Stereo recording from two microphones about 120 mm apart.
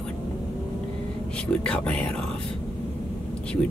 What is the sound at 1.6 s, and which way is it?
Speech, 10° left (ahead or behind).